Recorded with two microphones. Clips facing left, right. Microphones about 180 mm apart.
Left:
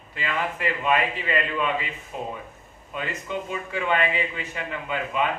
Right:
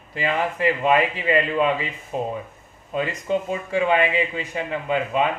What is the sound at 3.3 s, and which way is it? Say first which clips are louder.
A man's voice: right 8 dB; 35° right (ahead or behind).